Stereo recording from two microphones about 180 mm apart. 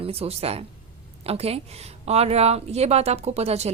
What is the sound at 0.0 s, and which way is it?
Speech, 35° right (ahead or behind).